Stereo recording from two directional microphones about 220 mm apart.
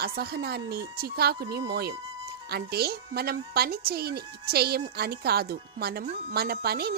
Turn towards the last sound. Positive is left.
turn(degrees=-45)  # may be behind; listen again after turning